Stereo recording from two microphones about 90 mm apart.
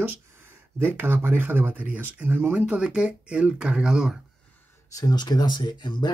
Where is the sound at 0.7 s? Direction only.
25° right (ahead or behind); by 4.2 s 10° right (ahead or behind).